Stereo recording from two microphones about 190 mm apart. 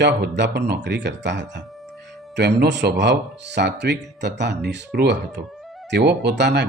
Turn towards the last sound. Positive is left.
turn(degrees=-60)  # may be behind; listen again after turning